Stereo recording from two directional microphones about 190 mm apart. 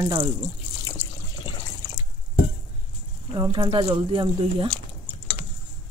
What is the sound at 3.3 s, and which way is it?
A woman's voice, 25° right (ahead or behind).